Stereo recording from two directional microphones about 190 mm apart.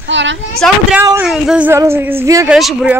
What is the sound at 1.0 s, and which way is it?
Speech, 15° right (ahead or behind).